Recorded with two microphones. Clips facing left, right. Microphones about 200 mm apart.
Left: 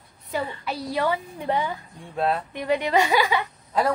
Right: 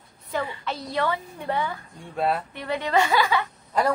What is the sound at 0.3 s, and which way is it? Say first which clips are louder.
A woman's voice: even; 15° left (ahead or behind).